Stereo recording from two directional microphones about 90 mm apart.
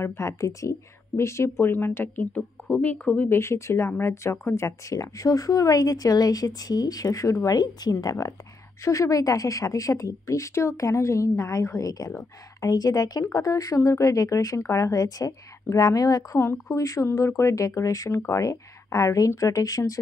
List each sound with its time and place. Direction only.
0.0 s a woman's voice: 30° left (ahead or behind)